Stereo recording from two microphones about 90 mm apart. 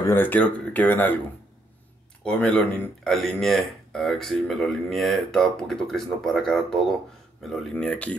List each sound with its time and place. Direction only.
0.1 s speech: 20° left (ahead or behind)
2.2 s speech: 15° left (ahead or behind)
3.1 s a man's voice: centre (ahead or behind)
7.7 s speech: 15° left (ahead or behind)